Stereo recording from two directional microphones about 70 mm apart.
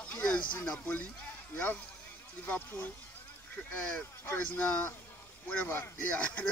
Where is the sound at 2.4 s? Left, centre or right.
Left.